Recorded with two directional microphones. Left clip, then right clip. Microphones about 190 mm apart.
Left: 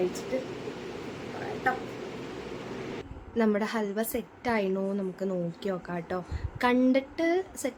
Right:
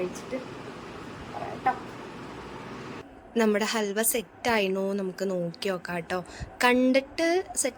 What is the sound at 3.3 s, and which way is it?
A woman's voice, 35° right (ahead or behind).